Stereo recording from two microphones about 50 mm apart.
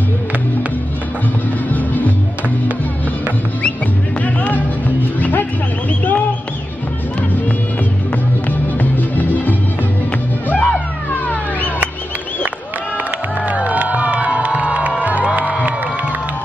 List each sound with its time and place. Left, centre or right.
1.7 s music: left
4.2 s music: left
8.5 s music: left
13.5 s music: right